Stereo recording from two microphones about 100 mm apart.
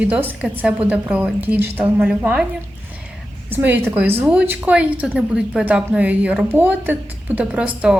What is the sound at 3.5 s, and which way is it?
A woman's voice, 20° right (ahead or behind).